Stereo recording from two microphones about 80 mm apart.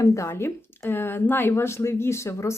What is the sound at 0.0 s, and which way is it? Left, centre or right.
Speech, left.